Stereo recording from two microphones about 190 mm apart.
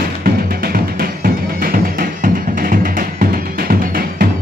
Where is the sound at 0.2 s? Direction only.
50° right (ahead or behind).